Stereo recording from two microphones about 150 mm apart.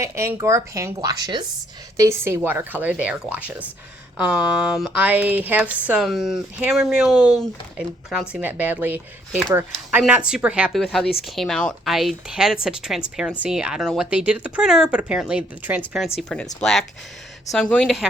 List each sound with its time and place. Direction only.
0.0 s a woman's voice: 20° right (ahead or behind)
2.0 s speech: 20° right (ahead or behind); by 7.2 s centre (ahead or behind)
8.3 s speech: 10° right (ahead or behind)
16.1 s speech: 5° left (ahead or behind)